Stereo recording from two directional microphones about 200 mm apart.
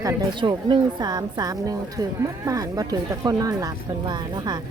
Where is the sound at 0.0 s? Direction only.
15° right (ahead or behind).